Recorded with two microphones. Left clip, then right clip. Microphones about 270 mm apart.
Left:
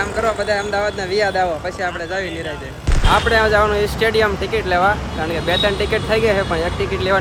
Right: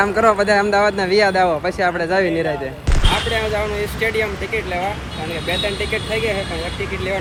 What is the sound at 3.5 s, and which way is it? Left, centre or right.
Speech, centre.